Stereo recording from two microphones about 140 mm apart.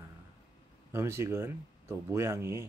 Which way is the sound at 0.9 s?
20° right (ahead or behind).